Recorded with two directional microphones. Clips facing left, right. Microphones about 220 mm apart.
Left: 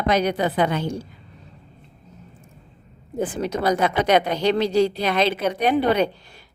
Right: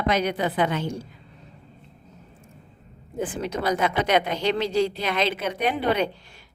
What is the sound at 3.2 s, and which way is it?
Speech, 40° left (ahead or behind).